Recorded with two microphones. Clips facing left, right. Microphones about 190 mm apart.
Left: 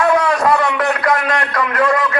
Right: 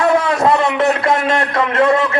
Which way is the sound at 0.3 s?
25° right (ahead or behind).